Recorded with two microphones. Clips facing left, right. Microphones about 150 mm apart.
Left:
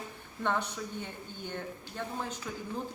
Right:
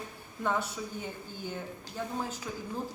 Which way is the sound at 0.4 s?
5° right (ahead or behind).